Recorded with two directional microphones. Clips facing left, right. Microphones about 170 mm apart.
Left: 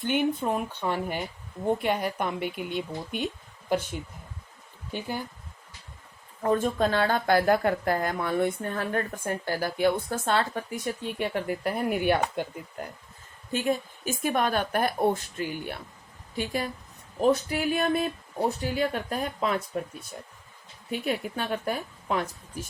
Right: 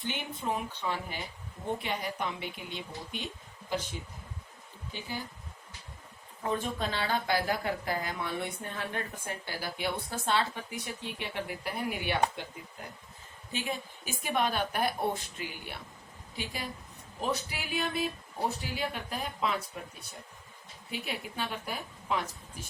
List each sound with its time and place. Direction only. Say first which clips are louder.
0.0 s speech: left 10 dB; 55° left (ahead or behind)
4.9 s speech: left 7 dB; 55° left (ahead or behind)
6.4 s speech: left 8 dB; 45° left (ahead or behind)
13.5 s speech: left 9 dB; 45° left (ahead or behind)
20.9 s speech: left 8 dB; 45° left (ahead or behind)